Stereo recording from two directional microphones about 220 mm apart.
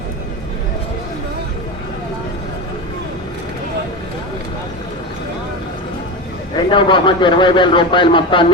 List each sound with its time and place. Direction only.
6.7 s speech: 20° left (ahead or behind)